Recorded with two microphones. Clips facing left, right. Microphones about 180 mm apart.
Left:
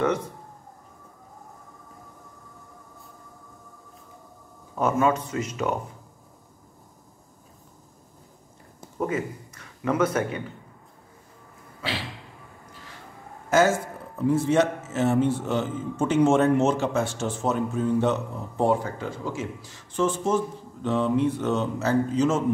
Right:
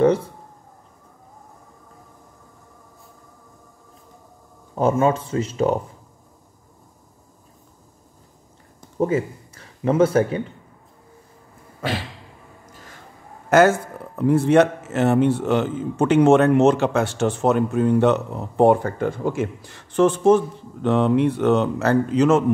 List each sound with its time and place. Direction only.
4.7 s speech: 30° right (ahead or behind)
9.0 s speech: 30° right (ahead or behind)
13.5 s speech: 65° right (ahead or behind)